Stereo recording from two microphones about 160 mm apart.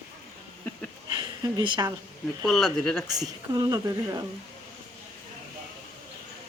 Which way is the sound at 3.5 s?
20° right (ahead or behind).